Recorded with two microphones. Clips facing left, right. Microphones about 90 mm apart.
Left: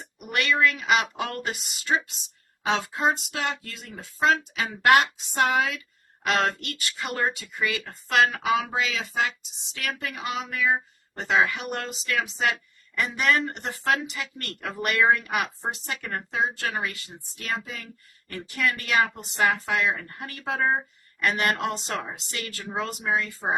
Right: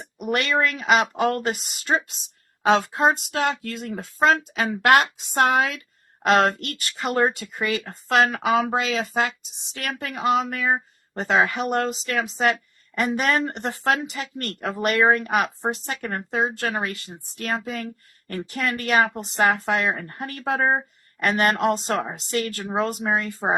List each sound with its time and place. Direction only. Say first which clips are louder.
0.2 s speech: right 2 dB; 35° right (ahead or behind)
2.6 s speech: right 6 dB; 50° right (ahead or behind)
6.2 s speech: right 6 dB; 40° right (ahead or behind)